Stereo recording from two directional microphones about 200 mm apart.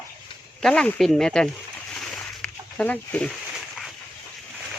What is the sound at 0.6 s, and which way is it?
Speech, 5° left (ahead or behind).